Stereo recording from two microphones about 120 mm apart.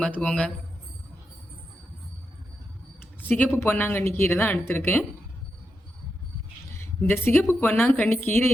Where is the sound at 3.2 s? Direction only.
15° left (ahead or behind).